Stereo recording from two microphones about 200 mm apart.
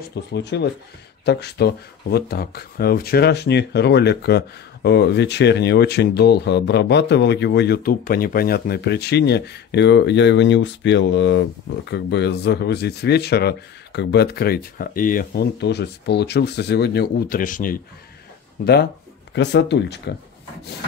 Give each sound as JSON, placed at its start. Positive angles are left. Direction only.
{"t": 0.1, "sound": "speech", "side_deg": 60}
{"t": 19.3, "sound": "speech", "side_deg": 60}